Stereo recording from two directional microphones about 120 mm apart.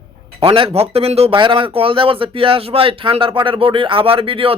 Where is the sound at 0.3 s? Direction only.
45° right (ahead or behind).